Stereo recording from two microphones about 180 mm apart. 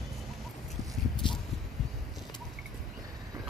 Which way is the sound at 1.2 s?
25° left (ahead or behind).